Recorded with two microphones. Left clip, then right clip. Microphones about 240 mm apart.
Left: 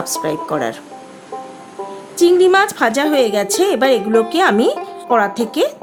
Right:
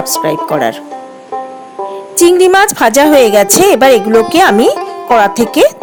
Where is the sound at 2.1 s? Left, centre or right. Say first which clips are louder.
Right 5 dB; right.